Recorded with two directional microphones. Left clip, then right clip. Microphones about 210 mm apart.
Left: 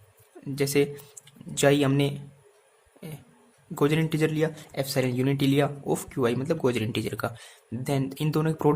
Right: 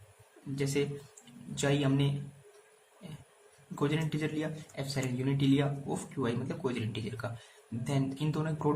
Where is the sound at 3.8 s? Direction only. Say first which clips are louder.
Left 9 dB; 50° left (ahead or behind).